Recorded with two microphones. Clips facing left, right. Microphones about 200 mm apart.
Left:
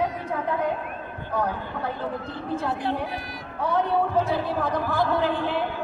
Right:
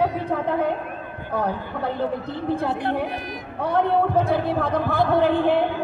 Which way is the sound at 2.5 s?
60° right (ahead or behind).